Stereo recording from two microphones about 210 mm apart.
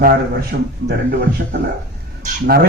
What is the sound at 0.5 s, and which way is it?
Speech, 50° right (ahead or behind).